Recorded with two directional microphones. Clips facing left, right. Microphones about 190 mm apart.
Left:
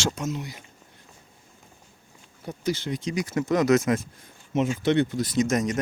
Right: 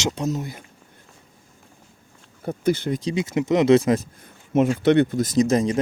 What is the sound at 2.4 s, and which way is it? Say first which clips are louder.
Speech: right 6 dB; 55° right (ahead or behind).